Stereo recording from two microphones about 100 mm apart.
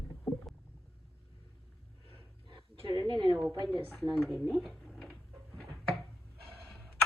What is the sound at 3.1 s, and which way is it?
Speech, 50° right (ahead or behind).